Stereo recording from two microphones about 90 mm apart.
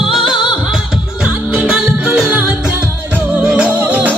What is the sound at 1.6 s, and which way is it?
Music, 10° right (ahead or behind).